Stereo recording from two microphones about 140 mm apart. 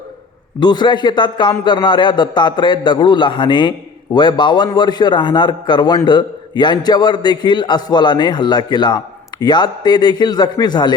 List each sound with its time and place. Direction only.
0.6 s a man's voice: 30° left (ahead or behind)